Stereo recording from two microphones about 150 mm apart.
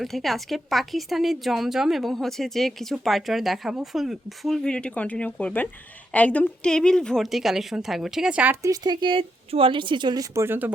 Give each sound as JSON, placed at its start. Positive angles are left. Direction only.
{"t": 0.0, "sound": "a woman's voice", "side_deg": 0}
{"t": 8.6, "sound": "speech", "side_deg": -25}